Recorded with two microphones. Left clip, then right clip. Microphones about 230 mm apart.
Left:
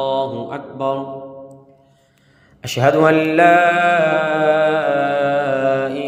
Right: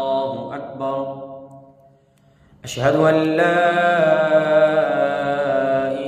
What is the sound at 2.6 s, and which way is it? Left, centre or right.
Mantra, left.